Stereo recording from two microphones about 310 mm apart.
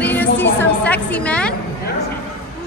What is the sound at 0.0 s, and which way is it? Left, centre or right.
Music, centre.